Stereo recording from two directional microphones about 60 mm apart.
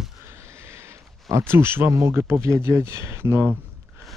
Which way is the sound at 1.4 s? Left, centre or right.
Right.